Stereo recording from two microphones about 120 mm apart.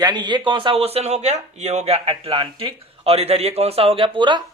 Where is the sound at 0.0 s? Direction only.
35° right (ahead or behind).